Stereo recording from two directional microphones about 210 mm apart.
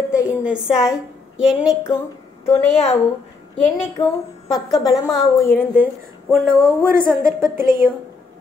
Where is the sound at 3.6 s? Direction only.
30° left (ahead or behind).